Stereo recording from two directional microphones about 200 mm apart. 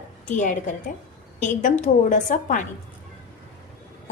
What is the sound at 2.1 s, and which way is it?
Speech, 40° left (ahead or behind).